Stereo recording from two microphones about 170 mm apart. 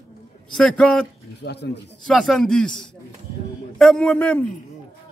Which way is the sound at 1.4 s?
80° left.